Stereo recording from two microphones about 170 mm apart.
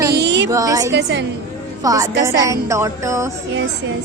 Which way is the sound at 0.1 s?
85° right.